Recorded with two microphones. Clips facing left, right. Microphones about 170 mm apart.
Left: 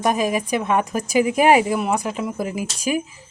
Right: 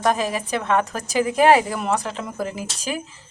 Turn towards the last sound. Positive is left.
turn(degrees=10)  # may be behind; listen again after turning